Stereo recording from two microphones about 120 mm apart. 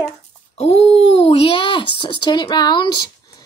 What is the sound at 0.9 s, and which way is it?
A child's voice, 55° left (ahead or behind).